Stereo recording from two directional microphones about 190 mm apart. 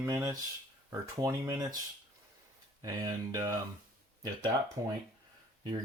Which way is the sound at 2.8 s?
20° right (ahead or behind).